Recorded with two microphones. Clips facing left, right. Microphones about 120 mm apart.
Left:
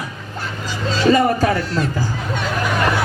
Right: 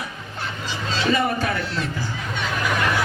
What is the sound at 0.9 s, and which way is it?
Speech, 40° left (ahead or behind).